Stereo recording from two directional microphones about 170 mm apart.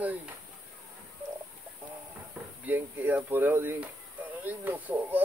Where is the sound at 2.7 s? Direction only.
10° right (ahead or behind).